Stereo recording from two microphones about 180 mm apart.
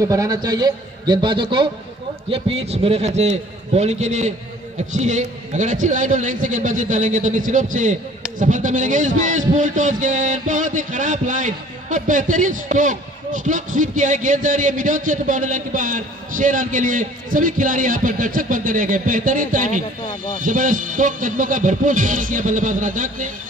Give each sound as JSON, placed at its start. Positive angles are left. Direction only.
{"t": 0.0, "sound": "a man's voice", "side_deg": -20}